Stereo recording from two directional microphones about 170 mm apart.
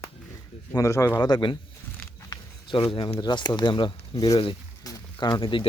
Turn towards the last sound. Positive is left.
turn(degrees=25)  # may be behind; listen again after turning